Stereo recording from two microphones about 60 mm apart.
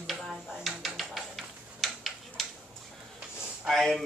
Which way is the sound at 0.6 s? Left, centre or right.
Centre.